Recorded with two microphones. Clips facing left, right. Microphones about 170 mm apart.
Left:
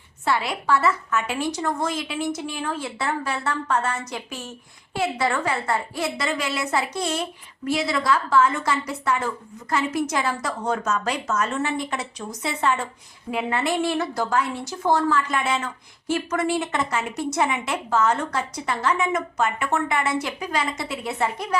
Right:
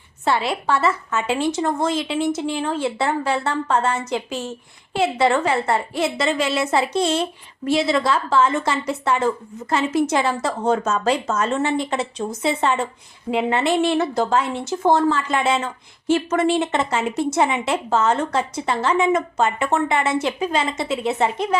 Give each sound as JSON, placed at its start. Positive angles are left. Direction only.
{"t": 0.3, "sound": "a woman's voice", "side_deg": -25}